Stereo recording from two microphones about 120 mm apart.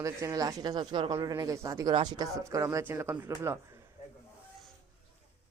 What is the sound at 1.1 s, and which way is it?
Speech, 25° right (ahead or behind).